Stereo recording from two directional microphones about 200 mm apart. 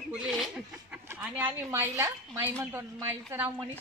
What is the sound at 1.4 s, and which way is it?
Speech, 10° right (ahead or behind).